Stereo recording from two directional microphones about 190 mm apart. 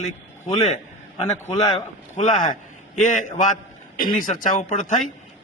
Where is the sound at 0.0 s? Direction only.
40° left (ahead or behind).